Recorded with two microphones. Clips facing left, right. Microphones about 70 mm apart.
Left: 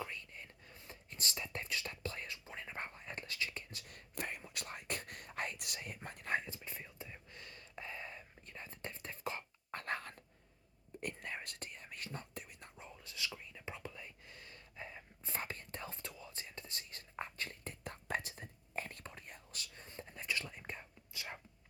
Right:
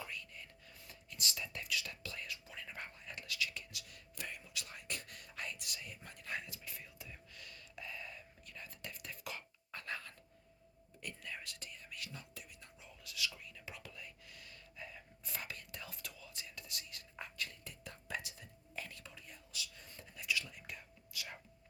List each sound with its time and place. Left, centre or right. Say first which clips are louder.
0.0 s whispering: left 2 dB; left
9.7 s dog: left 4 dB; left
11.0 s whispering: left 4 dB; left
13.0 s whispering: right 2 dB; left
19.8 s whispering: left 4 dB; left